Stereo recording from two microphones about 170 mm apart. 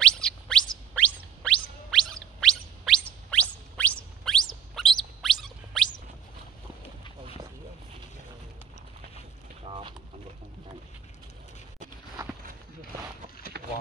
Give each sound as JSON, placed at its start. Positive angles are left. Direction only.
{"t": 0.0, "sound": "music", "side_deg": 5}
{"t": 9.7, "sound": "a sound", "side_deg": -30}
{"t": 13.5, "sound": "vehicle", "side_deg": -75}